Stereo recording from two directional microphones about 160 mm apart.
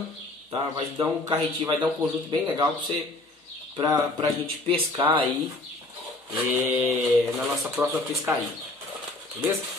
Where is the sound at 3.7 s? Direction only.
20° right (ahead or behind).